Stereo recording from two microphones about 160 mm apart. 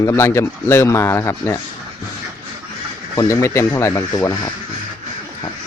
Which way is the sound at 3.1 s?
20° left (ahead or behind).